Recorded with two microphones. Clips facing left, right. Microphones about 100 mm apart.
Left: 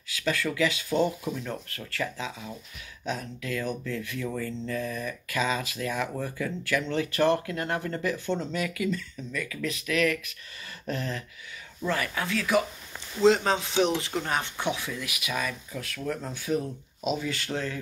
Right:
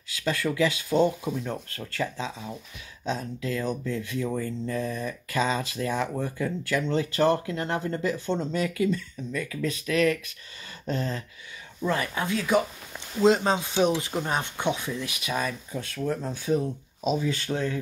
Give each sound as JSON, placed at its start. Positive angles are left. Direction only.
{"t": 0.2, "sound": "speech", "side_deg": -25}
{"t": 17.5, "sound": "speech", "side_deg": -5}